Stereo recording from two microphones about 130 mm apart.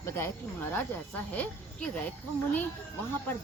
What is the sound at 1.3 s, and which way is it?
A child's voice, 10° left (ahead or behind).